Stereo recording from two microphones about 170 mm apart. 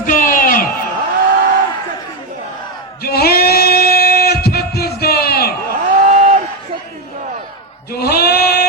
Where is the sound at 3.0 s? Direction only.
65° left (ahead or behind).